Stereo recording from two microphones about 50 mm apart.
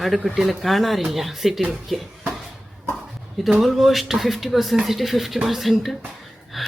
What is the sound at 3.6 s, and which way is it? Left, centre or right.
Speech, centre.